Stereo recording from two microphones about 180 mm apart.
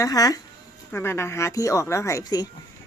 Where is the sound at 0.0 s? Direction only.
20° left (ahead or behind).